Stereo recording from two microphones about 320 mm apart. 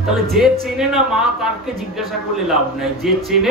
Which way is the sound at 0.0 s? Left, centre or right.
Centre.